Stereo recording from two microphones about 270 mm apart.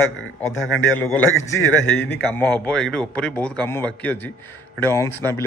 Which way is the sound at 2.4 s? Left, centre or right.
Centre.